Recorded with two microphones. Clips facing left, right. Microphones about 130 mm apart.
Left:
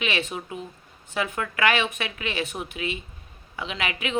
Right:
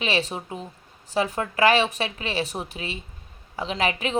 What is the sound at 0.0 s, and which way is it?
A woman's voice, 35° right (ahead or behind).